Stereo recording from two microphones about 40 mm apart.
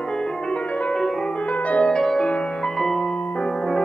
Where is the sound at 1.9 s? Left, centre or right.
Centre.